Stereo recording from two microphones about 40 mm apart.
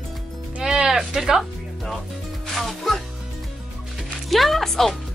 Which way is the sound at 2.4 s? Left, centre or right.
Centre.